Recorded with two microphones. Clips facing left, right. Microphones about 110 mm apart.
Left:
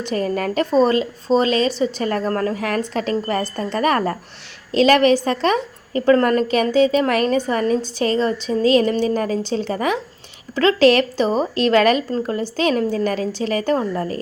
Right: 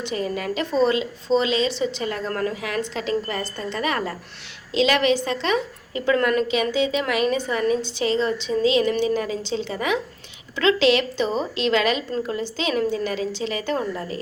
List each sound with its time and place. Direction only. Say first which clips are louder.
0.0 s a woman's voice: left 5 dB; 45° left (ahead or behind)